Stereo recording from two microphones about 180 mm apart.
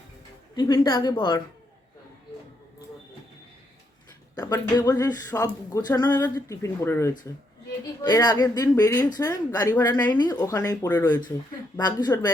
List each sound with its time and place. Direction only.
0.5 s speech: 25° left (ahead or behind)
4.4 s speech: 20° left (ahead or behind)